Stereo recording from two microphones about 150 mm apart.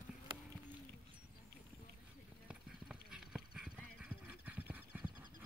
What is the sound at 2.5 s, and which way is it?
Clip-clop, 5° right (ahead or behind).